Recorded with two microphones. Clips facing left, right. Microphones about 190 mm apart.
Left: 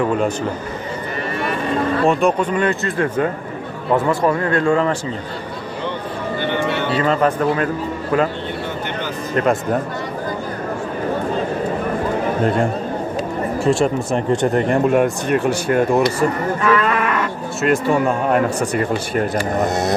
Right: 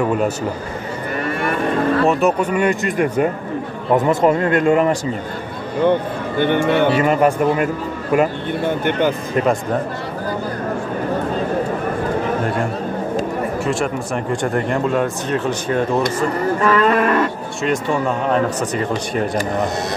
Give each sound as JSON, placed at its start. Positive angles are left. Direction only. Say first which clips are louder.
{"t": 0.0, "sound": "a man's voice", "louder": "even", "side_deg": -5}
{"t": 2.0, "sound": "a man's voice", "louder": "even", "side_deg": -5}
{"t": 5.8, "sound": "speech", "louder": "right 10 dB", "side_deg": -55}
{"t": 7.0, "sound": "a man's voice", "louder": "right 2 dB", "side_deg": -15}
{"t": 8.6, "sound": "speech", "louder": "right 8 dB", "side_deg": -55}
{"t": 13.7, "sound": "speech", "louder": "left 4 dB", "side_deg": 30}
{"t": 16.6, "sound": "cattle", "louder": "right 3 dB", "side_deg": -35}
{"t": 17.6, "sound": "speech", "louder": "left 3 dB", "side_deg": 5}